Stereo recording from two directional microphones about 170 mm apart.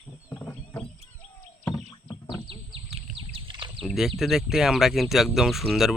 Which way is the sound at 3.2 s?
30° right (ahead or behind).